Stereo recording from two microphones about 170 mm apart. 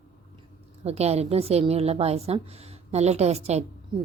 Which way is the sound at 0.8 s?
40° right (ahead or behind).